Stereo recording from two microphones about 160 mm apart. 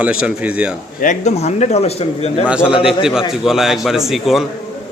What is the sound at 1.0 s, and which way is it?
Speech, 50° left (ahead or behind).